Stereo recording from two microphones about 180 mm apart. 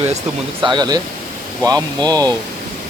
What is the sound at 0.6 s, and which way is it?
Speech, 25° right (ahead or behind).